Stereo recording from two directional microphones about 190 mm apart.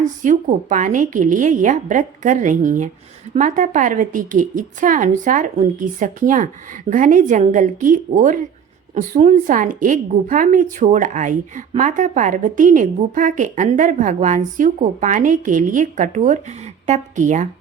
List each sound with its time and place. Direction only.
0.0 s a woman's voice: 40° right (ahead or behind)